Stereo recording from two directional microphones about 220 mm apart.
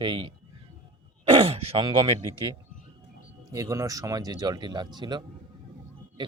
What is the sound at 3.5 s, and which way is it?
Speech, 15° right (ahead or behind).